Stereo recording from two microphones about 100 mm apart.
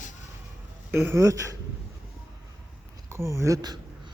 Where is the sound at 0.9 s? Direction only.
25° right (ahead or behind).